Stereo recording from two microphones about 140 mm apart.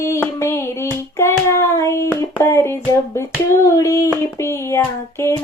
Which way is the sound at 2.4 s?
20° left (ahead or behind).